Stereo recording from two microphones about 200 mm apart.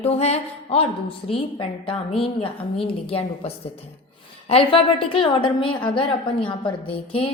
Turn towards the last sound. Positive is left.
turn(degrees=25)  # may be behind; listen again after turning